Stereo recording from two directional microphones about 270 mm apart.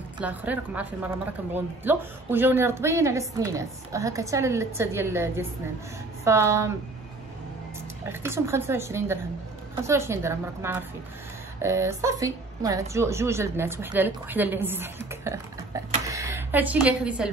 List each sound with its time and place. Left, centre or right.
0.2 s a woman's voice: centre
8.1 s a woman's voice: centre